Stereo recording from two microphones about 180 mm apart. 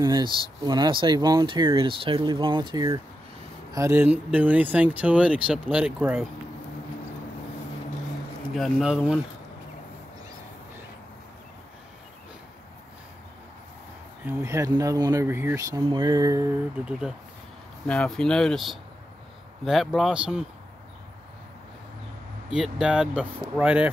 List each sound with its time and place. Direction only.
0.0 s speech: 25° right (ahead or behind); by 6.2 s 5° right (ahead or behind)
8.5 s speech: centre (ahead or behind)
14.2 s speech: 15° right (ahead or behind)
17.8 s speech: 5° left (ahead or behind)
22.5 s speech: 5° right (ahead or behind)